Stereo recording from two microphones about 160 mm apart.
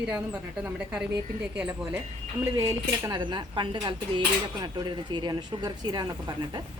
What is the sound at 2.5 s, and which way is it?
Speech, 20° right (ahead or behind).